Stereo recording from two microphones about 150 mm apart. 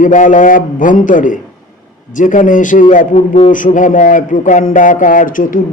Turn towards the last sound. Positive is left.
turn(degrees=60)  # may be behind; listen again after turning